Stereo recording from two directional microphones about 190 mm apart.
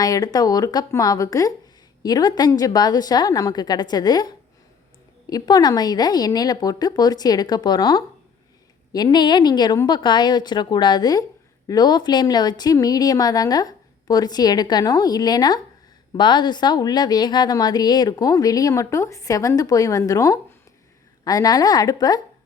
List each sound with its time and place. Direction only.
0.0 s speech: 20° left (ahead or behind)